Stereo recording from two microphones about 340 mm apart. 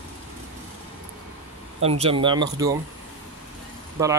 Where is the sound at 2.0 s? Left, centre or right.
Centre.